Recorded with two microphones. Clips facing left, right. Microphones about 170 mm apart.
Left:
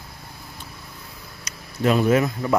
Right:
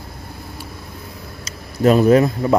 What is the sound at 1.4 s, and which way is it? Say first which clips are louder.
Speech: right 6 dB; 40° right (ahead or behind).